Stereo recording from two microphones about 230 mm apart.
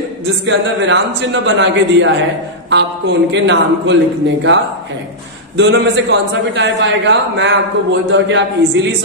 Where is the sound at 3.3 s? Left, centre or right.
Right.